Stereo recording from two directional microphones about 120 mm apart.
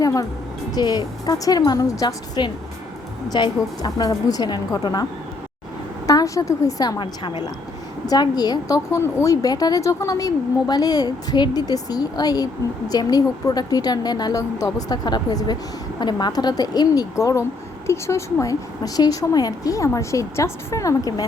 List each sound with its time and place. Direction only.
0.0 s music: 30° left (ahead or behind)
0.7 s a woman's voice: 35° left (ahead or behind)
6.1 s a woman's voice: 25° left (ahead or behind)